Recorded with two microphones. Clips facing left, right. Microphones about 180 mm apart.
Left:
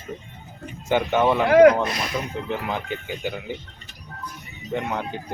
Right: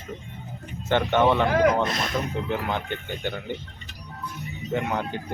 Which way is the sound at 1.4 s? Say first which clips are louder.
Left 8 dB; 70° left (ahead or behind).